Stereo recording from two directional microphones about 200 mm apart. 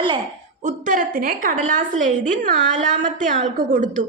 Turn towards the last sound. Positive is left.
turn(degrees=-40)  # may be behind; listen again after turning